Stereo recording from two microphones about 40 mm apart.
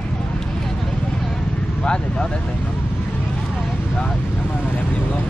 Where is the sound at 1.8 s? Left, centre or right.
Left.